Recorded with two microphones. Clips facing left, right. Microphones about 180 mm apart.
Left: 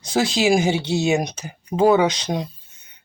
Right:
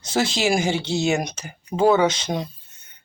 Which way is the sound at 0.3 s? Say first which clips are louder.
Left 6 dB; 15° left (ahead or behind).